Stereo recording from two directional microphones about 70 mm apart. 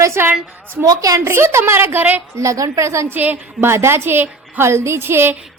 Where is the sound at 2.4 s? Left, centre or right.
Right.